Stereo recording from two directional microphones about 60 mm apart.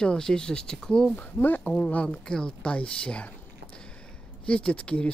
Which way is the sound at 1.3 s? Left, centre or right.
Left.